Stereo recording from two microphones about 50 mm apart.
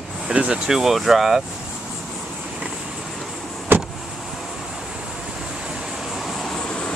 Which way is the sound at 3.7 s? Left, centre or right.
Right.